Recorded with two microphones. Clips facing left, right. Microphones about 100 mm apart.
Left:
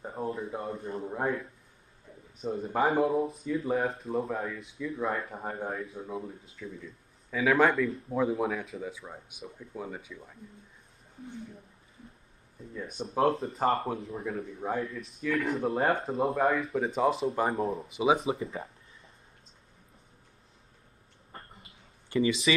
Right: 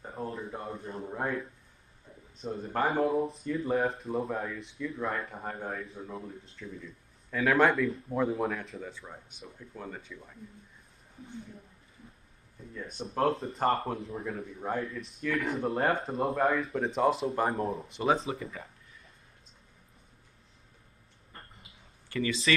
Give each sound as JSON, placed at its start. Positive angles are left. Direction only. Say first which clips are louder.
{"t": 0.2, "sound": "speech", "louder": "left 3 dB", "side_deg": 0}
{"t": 2.7, "sound": "speech", "louder": "left 2 dB", "side_deg": 5}
{"t": 12.9, "sound": "speech", "louder": "left 2 dB", "side_deg": 5}
{"t": 18.3, "sound": "speech", "louder": "left 4 dB", "side_deg": 30}
{"t": 22.1, "sound": "speech", "louder": "left 5 dB", "side_deg": 20}